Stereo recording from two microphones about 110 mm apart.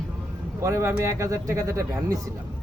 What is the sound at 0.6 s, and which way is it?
Speech, 25° right (ahead or behind).